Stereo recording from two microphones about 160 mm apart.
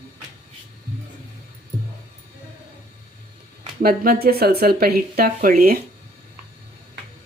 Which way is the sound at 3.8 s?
70° right (ahead or behind).